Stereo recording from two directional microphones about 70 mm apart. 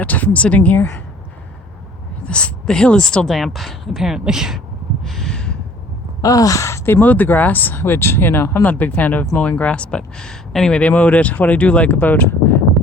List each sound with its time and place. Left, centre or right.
0.0 s speech: left
2.2 s speech: centre
5.0 s a sound: centre
6.2 s speech: left
8.7 s speech: left
10.8 s speech: left